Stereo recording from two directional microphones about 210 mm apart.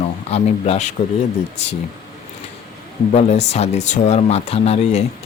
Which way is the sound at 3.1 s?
30° left (ahead or behind).